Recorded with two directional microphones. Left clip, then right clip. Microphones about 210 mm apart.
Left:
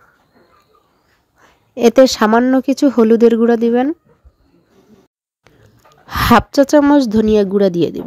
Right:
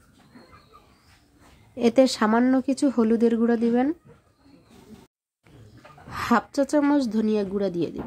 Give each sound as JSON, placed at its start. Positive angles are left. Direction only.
{"t": 1.8, "sound": "speech", "side_deg": 40}
{"t": 6.0, "sound": "speech", "side_deg": 45}